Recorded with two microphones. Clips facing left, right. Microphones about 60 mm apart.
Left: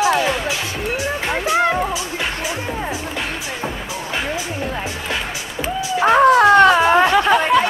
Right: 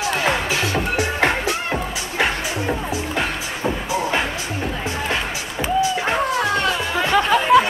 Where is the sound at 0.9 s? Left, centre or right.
Right.